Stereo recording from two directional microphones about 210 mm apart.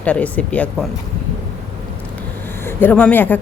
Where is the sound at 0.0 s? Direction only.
5° left (ahead or behind).